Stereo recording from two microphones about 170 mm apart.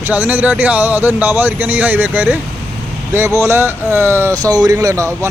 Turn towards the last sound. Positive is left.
turn(degrees=-15)  # may be behind; listen again after turning